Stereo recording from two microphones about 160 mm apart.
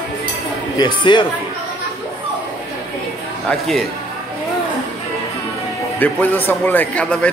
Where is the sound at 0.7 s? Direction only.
30° left (ahead or behind).